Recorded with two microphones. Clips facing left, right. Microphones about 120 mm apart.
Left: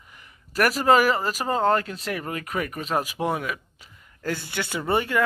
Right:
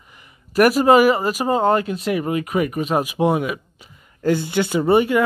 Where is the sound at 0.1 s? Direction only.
15° right (ahead or behind).